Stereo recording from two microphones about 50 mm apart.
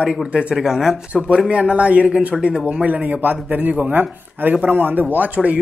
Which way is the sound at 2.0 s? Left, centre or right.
Centre.